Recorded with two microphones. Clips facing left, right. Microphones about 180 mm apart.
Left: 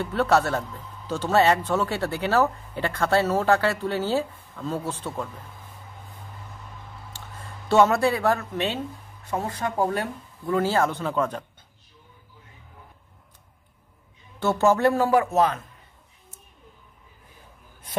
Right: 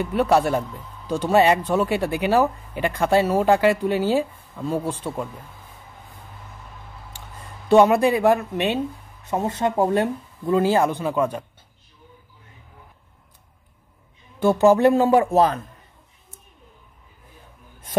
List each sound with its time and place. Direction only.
0.0 s speech: 15° right (ahead or behind)
7.1 s speech: 15° right (ahead or behind)
14.4 s speech: 15° right (ahead or behind); by 15.6 s 35° right (ahead or behind)